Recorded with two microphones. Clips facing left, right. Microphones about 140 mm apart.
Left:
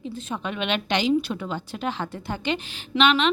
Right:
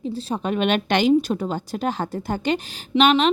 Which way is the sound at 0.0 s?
35° right (ahead or behind).